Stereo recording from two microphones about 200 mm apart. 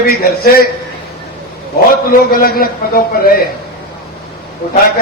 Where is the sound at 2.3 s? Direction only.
45° left (ahead or behind).